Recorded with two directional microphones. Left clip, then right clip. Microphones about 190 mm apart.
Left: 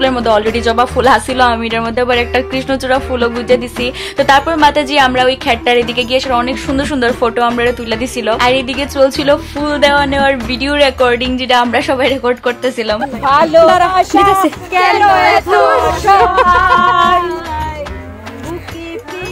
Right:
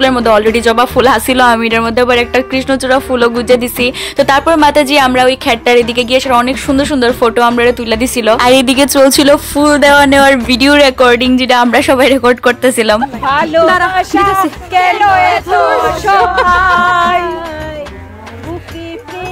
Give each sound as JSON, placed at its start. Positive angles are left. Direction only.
{"t": 0.0, "sound": "speech", "side_deg": -25}
{"t": 8.4, "sound": "speech", "side_deg": -45}
{"t": 13.2, "sound": "speech", "side_deg": -10}
{"t": 14.7, "sound": "speech", "side_deg": -25}
{"t": 16.4, "sound": "speech", "side_deg": -30}